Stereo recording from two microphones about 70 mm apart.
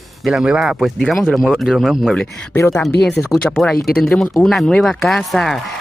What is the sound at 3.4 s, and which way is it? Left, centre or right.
Speech, centre.